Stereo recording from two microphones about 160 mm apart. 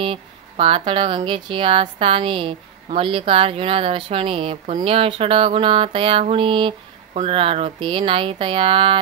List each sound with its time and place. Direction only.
0.0 s speech: 35° right (ahead or behind)